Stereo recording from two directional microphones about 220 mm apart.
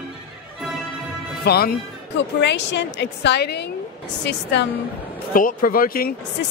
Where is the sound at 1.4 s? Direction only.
45° left (ahead or behind).